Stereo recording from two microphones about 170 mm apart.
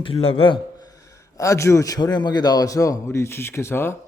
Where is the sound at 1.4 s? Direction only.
15° left (ahead or behind).